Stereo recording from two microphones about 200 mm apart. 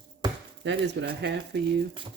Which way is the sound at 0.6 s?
60° right (ahead or behind).